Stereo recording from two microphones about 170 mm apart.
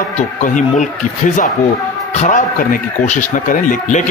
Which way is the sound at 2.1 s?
45° left (ahead or behind).